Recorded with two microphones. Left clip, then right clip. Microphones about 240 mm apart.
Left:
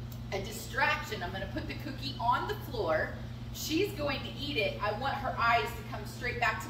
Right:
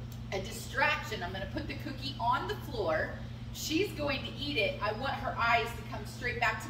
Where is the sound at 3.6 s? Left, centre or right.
Centre.